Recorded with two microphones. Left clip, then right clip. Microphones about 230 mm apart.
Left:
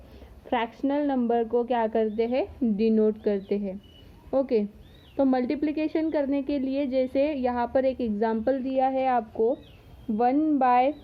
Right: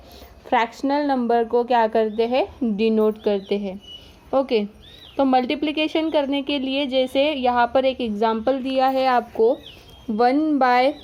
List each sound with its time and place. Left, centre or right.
0.5 s speech: centre